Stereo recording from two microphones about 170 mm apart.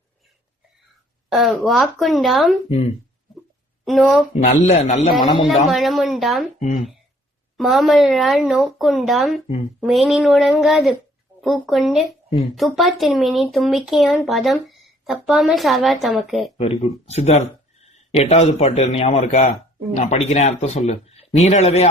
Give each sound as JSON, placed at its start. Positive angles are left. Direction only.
{"t": 1.3, "sound": "speech", "side_deg": 0}
{"t": 2.6, "sound": "a man's voice", "side_deg": 40}
{"t": 3.8, "sound": "speech", "side_deg": 0}
{"t": 4.5, "sound": "a man's voice", "side_deg": 40}
{"t": 5.2, "sound": "a man's voice", "side_deg": 30}
{"t": 5.6, "sound": "speech", "side_deg": 0}
{"t": 6.6, "sound": "speech", "side_deg": 40}
{"t": 7.5, "sound": "speech", "side_deg": 0}
{"t": 16.6, "sound": "a man's voice", "side_deg": 40}